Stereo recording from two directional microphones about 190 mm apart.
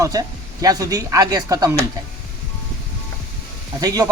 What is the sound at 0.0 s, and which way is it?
Speech, 20° right (ahead or behind).